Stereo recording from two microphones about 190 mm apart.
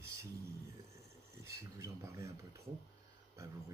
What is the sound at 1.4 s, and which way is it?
Speech, 15° right (ahead or behind).